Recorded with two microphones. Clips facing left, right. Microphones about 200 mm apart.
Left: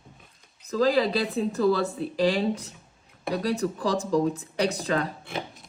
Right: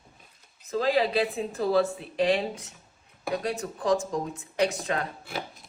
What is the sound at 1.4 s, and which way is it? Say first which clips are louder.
Speech: left 4 dB; 35° left (ahead or behind).